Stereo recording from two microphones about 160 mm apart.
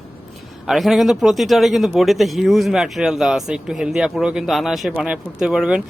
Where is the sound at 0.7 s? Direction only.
Centre (ahead or behind).